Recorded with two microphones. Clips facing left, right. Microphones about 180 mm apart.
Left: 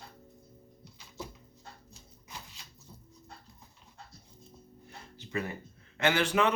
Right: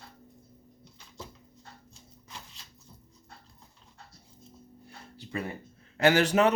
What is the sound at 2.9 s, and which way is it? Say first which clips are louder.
Dog: left 4 dB; centre (ahead or behind).